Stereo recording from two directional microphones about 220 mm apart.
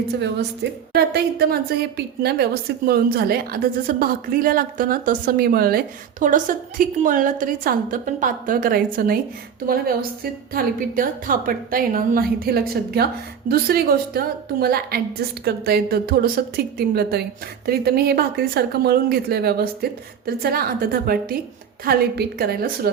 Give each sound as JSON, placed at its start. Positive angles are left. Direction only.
{"t": 0.2, "sound": "a woman's voice", "side_deg": -50}
{"t": 10.5, "sound": "a woman's voice", "side_deg": -40}